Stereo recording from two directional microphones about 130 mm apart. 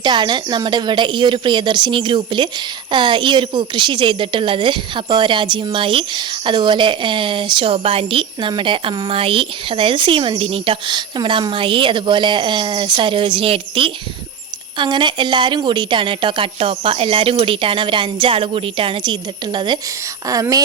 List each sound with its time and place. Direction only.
0.0 s a woman's voice: 35° right (ahead or behind)